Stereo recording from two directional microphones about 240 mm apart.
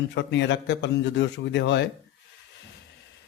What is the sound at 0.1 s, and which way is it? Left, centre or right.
A man's voice, left.